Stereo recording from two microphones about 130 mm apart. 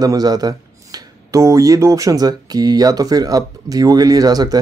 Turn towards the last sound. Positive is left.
turn(degrees=-30)  # may be behind; listen again after turning